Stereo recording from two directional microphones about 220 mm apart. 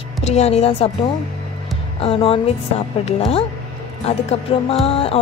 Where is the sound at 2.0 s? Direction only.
25° left (ahead or behind).